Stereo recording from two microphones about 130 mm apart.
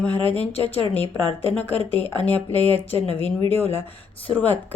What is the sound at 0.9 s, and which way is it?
Speech, 15° left (ahead or behind).